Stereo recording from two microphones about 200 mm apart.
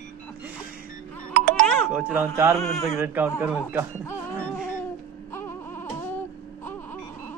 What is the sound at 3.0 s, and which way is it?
Speech, 10° right (ahead or behind).